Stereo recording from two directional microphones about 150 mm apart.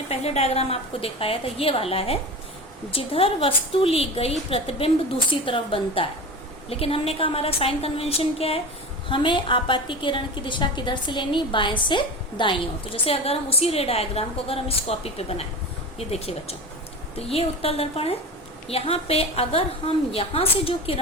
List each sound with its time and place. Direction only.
0.1 s a woman's voice: 45° left (ahead or behind)